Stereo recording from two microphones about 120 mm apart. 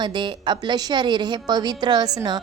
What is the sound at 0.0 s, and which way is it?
Speech, 40° right (ahead or behind).